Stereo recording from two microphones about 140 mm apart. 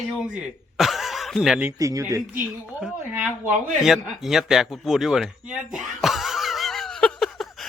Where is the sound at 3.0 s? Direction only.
10° right (ahead or behind).